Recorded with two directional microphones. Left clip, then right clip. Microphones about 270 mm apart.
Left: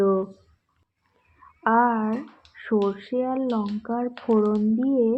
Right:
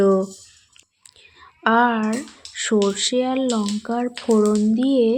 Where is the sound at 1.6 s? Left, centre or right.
Right.